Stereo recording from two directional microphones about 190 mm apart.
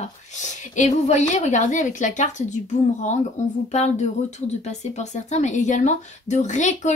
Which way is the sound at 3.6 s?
35° left (ahead or behind).